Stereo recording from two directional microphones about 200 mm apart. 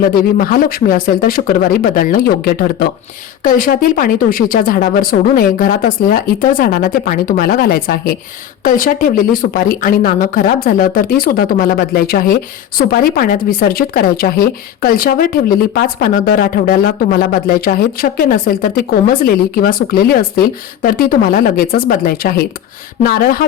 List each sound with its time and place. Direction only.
0.2 s speech: 45° left (ahead or behind)